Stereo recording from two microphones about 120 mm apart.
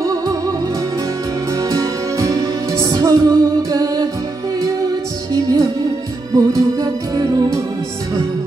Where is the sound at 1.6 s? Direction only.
30° right (ahead or behind).